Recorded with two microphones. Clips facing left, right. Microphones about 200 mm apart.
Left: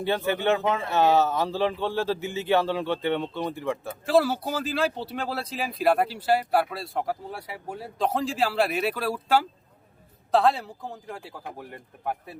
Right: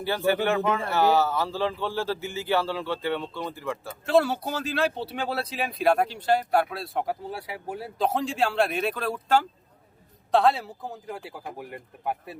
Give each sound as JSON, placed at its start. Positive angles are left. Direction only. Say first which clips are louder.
{"t": 0.0, "sound": "speech", "louder": "right 1 dB", "side_deg": 20}
{"t": 4.0, "sound": "speech", "louder": "even", "side_deg": 0}